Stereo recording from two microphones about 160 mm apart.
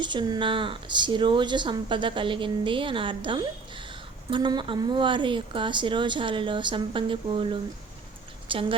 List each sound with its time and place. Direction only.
0.0 s speech: 30° right (ahead or behind)